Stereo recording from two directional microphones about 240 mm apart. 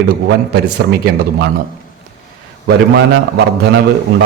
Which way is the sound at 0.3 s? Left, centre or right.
Right.